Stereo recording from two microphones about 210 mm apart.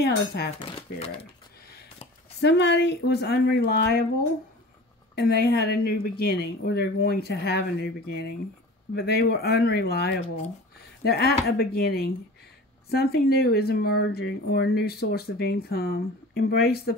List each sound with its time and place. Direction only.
0.0 s speech: 50° left (ahead or behind)
0.6 s speech: 25° left (ahead or behind)
2.4 s speech: 55° left (ahead or behind)
5.1 s speech: 45° left (ahead or behind)